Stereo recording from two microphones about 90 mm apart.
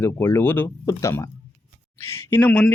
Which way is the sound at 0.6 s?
35° left (ahead or behind).